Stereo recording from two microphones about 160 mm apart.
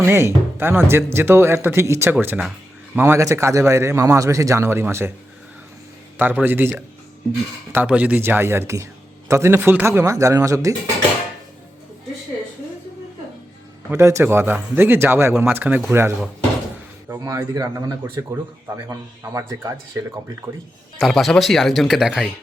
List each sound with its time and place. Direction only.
0.0 s a man's voice: 15° right (ahead or behind)
6.1 s a man's voice: 10° right (ahead or behind)
13.9 s a man's voice: 20° right (ahead or behind)
21.0 s speech: centre (ahead or behind)